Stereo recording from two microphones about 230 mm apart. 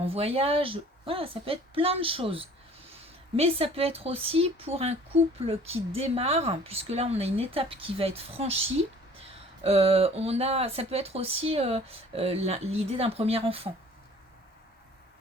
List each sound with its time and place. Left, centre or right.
0.0 s speech: right